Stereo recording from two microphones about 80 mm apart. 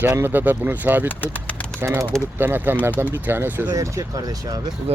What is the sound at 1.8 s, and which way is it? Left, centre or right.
Speech, right.